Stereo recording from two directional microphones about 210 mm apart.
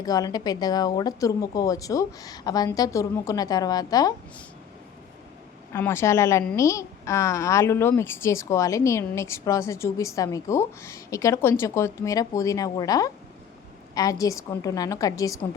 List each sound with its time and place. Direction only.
0.0 s a woman's voice: 20° left (ahead or behind)
5.7 s a woman's voice: 10° left (ahead or behind)